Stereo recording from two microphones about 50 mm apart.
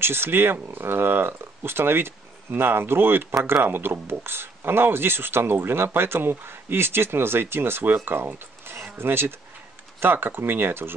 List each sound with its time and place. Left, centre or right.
0.0 s speech: right